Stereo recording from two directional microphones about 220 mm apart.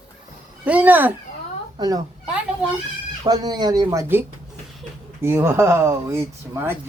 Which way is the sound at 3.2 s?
20° right (ahead or behind).